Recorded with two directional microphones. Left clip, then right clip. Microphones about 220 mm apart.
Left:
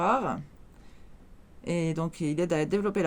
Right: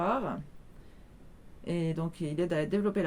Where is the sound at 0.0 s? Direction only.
50° left (ahead or behind).